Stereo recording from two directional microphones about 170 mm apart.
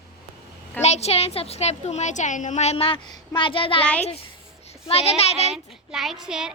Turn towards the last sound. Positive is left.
turn(degrees=-5)  # may be behind; listen again after turning